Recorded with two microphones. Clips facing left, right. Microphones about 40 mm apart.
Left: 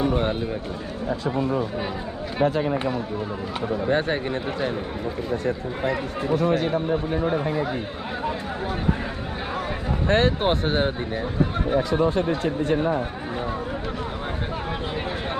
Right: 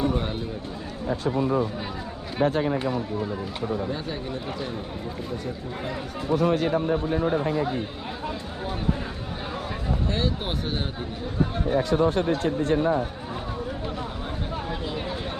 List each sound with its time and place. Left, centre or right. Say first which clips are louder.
0.0 s speech: left 3 dB; left
2.4 s speech: left 1 dB; left
3.8 s speech: left 8 dB; left
5.8 s speech: left 7 dB; left
6.7 s speech: even; centre
10.1 s speech: left 11 dB; left
12.4 s speech: even; left